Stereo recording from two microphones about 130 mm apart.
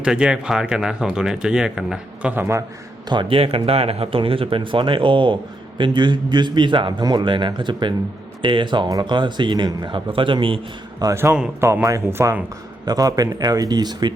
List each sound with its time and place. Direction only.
0.0 s speech: 5° right (ahead or behind)
2.3 s speech: 20° right (ahead or behind)
3.1 s speech: 40° right (ahead or behind)
11.0 s speech: 20° right (ahead or behind)
12.8 s speech: 30° right (ahead or behind)